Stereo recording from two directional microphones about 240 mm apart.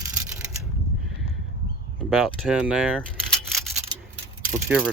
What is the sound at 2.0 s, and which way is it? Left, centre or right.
Speech, centre.